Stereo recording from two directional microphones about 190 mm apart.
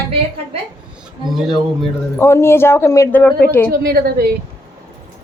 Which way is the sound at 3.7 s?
55° right (ahead or behind).